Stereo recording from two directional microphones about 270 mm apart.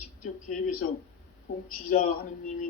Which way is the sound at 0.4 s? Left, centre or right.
Left.